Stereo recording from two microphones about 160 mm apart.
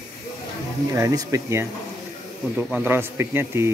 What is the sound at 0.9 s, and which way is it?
Speech, 20° right (ahead or behind).